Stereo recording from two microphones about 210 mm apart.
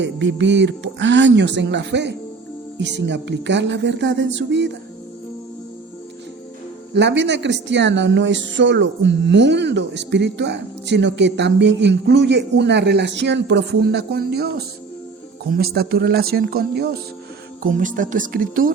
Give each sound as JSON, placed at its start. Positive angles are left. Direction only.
{"t": 0.0, "sound": "a woman's voice", "side_deg": -60}
{"t": 6.9, "sound": "a woman's voice", "side_deg": -55}